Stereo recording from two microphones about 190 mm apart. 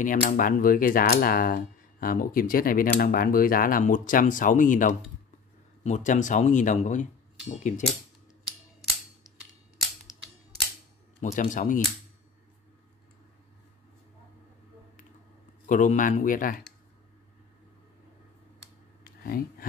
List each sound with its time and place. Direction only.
0.0 s speech: 45° left (ahead or behind)
11.2 s speech: 40° left (ahead or behind)
15.6 s speech: 40° left (ahead or behind)
19.0 s a sound: 50° left (ahead or behind)